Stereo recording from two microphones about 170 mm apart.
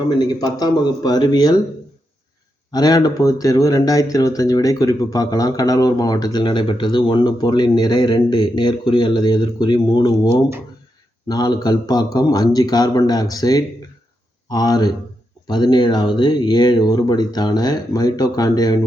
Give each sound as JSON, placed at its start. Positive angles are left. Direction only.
{"t": 0.0, "sound": "speech", "side_deg": 25}
{"t": 2.7, "sound": "speech", "side_deg": 25}
{"t": 11.3, "sound": "speech", "side_deg": 25}